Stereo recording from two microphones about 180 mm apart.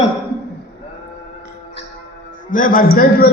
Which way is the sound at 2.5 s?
50° left (ahead or behind).